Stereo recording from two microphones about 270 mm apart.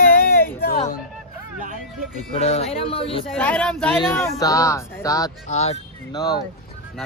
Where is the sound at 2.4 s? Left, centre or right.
Left.